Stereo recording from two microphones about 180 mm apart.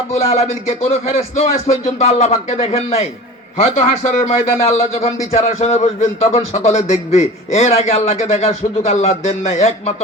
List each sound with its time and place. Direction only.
0.1 s a man's voice: 35° left (ahead or behind)
4.3 s a man's voice: 35° left (ahead or behind)